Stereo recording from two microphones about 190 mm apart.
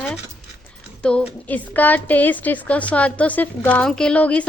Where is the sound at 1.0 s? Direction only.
5° left (ahead or behind).